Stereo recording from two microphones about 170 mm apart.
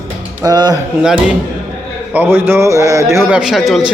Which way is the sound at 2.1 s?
10° right (ahead or behind).